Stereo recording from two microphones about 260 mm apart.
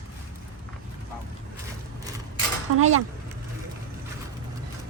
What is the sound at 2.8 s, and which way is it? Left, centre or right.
Speech, right.